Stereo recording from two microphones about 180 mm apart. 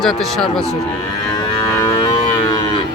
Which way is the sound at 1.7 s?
15° left (ahead or behind).